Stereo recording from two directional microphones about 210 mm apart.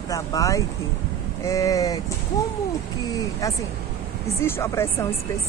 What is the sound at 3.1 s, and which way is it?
Speech, 15° left (ahead or behind).